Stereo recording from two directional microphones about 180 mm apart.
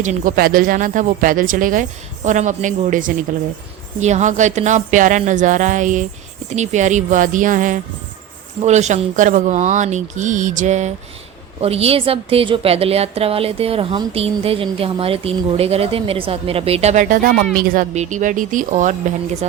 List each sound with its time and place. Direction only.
0.0 s a woman's voice: 45° right (ahead or behind)